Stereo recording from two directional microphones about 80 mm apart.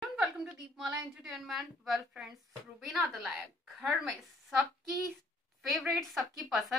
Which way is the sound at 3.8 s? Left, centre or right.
Centre.